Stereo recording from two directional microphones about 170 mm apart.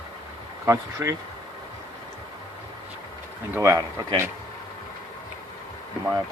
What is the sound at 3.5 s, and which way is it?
Speech, 15° right (ahead or behind).